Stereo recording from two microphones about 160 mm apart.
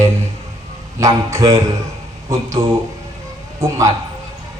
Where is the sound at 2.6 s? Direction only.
35° right (ahead or behind).